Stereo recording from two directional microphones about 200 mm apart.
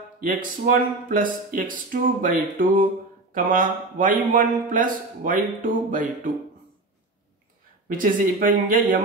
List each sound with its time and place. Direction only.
0.2 s speech: 40° right (ahead or behind)
8.0 s speech: 40° right (ahead or behind)